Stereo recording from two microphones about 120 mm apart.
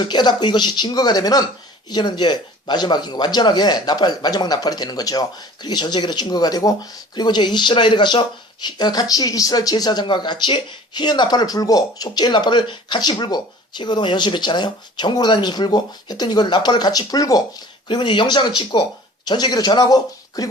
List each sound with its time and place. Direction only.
0.0 s speech: 40° left (ahead or behind)
17.8 s speech: 40° left (ahead or behind)